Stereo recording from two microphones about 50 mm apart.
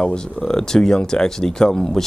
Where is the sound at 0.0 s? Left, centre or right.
Centre.